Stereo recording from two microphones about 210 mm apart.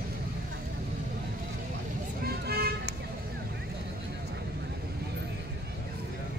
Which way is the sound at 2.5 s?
45° right (ahead or behind).